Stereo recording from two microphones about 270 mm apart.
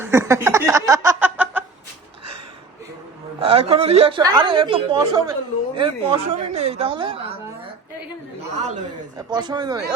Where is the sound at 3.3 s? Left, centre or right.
Right.